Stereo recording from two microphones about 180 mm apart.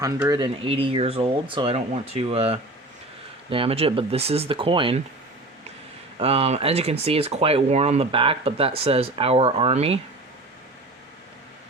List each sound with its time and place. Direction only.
0.0 s speech: 20° right (ahead or behind)
6.1 s speech: 35° right (ahead or behind)